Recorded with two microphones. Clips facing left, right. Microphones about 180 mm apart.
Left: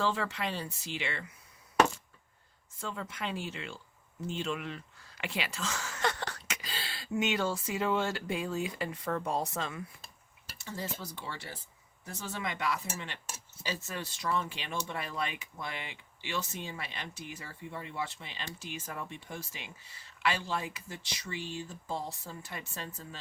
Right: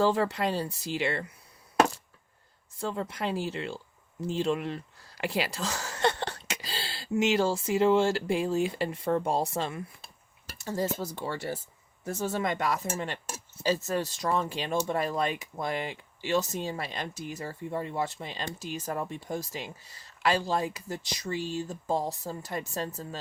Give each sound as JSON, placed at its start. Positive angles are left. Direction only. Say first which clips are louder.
{"t": 0.0, "sound": "speech", "louder": "right 7 dB", "side_deg": -40}
{"t": 2.8, "sound": "speech", "louder": "right 7 dB", "side_deg": -35}
{"t": 10.6, "sound": "speech", "louder": "right 9 dB", "side_deg": -40}